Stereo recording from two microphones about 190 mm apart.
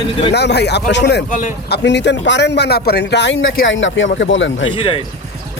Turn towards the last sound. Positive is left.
turn(degrees=25)  # may be behind; listen again after turning